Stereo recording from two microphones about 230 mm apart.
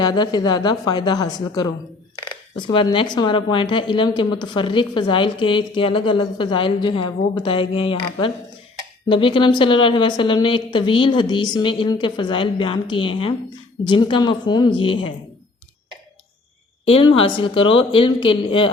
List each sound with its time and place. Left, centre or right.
0.0 s a woman's voice: centre
16.8 s a woman's voice: left